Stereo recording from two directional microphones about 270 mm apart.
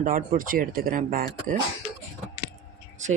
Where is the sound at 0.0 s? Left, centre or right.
Right.